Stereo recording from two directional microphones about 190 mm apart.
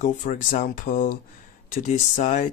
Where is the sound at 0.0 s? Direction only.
40° left (ahead or behind).